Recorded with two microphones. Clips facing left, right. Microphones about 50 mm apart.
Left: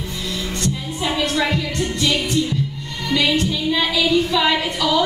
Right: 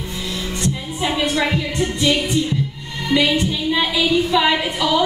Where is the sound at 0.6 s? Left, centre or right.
Centre.